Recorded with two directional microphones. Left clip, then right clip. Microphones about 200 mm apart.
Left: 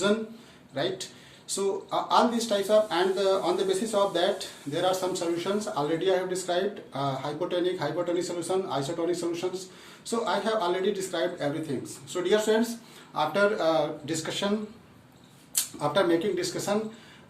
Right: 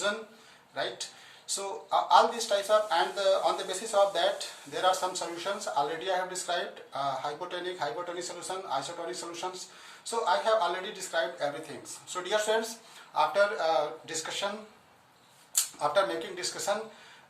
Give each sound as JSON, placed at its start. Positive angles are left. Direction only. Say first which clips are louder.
{"t": 0.8, "sound": "speech", "louder": "left 4 dB", "side_deg": 10}
{"t": 9.4, "sound": "speech", "louder": "left 5 dB", "side_deg": 0}
{"t": 15.5, "sound": "speech", "louder": "left 1 dB", "side_deg": 10}